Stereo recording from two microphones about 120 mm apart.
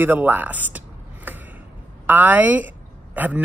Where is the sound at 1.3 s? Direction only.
15° right (ahead or behind).